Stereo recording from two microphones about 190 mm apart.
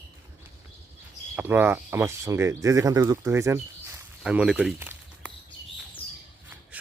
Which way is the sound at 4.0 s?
5° right (ahead or behind).